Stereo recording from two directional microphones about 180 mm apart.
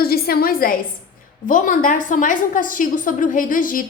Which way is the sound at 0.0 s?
55° left (ahead or behind).